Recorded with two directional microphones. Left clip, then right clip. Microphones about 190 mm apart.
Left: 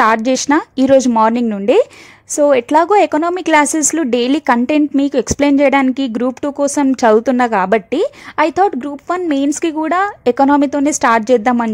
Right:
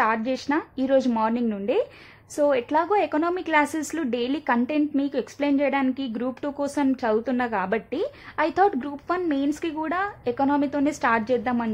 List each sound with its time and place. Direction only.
0.0 s a woman's voice: 45° left (ahead or behind)